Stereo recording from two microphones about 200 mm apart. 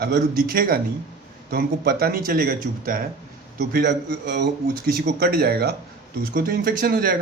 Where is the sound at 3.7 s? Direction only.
55° right (ahead or behind).